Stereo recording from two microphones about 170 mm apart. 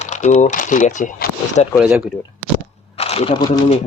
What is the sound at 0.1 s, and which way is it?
Speech, 45° left (ahead or behind).